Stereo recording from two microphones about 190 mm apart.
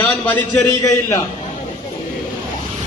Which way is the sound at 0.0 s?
10° left (ahead or behind).